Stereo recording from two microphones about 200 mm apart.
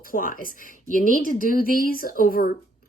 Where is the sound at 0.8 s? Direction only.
40° right (ahead or behind).